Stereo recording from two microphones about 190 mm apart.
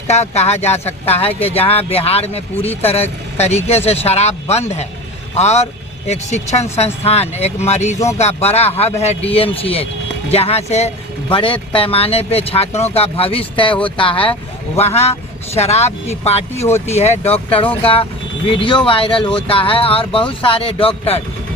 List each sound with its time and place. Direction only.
0.1 s speech: 35° left (ahead or behind)
16.6 s speech: 15° left (ahead or behind)
16.9 s speech: 35° left (ahead or behind)